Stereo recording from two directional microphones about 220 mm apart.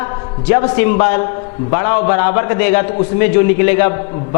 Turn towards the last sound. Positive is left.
turn(degrees=15)  # may be behind; listen again after turning